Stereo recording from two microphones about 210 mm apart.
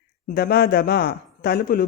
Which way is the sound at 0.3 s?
45° left (ahead or behind).